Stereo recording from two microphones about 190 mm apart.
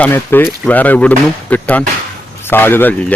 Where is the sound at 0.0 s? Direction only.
10° left (ahead or behind).